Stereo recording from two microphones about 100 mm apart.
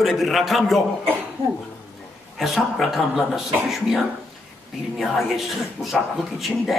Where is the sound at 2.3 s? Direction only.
Centre (ahead or behind).